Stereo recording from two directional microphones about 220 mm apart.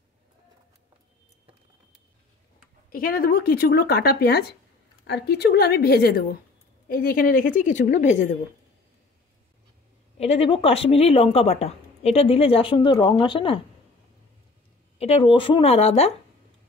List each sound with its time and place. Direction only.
2.9 s a woman's voice: 40° left (ahead or behind)
10.1 s speech: 25° left (ahead or behind)
15.0 s speech: 25° left (ahead or behind)